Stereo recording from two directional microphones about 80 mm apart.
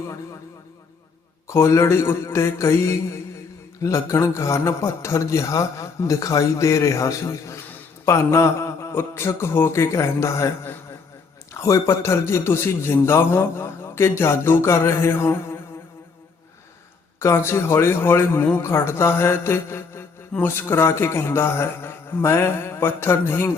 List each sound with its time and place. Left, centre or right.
1.5 s a man's voice: left
8.0 s mantra: left
8.9 s a man's voice: left
17.2 s a man's voice: left